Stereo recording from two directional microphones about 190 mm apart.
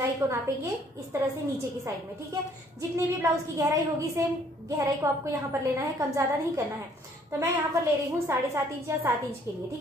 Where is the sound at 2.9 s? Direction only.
15° right (ahead or behind).